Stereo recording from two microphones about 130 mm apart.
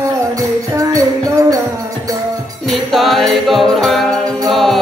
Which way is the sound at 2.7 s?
Centre (ahead or behind).